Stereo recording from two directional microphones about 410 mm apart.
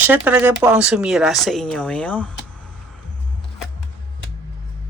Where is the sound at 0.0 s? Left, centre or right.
Centre.